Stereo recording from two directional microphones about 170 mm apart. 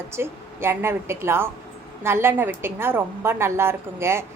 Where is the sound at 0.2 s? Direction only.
15° right (ahead or behind).